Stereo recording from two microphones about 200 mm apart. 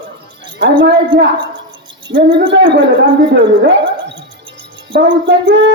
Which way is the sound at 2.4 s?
65° right (ahead or behind).